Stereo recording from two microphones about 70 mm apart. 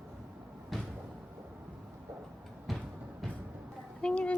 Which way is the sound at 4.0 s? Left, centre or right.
Centre.